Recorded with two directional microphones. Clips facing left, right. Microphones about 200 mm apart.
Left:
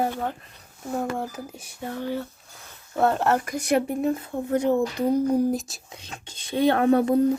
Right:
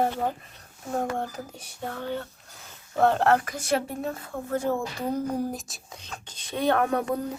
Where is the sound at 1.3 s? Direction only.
10° left (ahead or behind).